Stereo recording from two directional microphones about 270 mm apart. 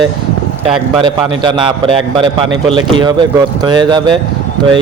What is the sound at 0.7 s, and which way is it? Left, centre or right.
Speech, centre.